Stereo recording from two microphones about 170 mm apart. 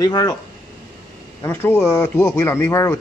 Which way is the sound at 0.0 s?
25° left (ahead or behind).